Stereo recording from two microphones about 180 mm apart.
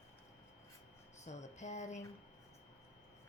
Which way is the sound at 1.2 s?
40° left (ahead or behind).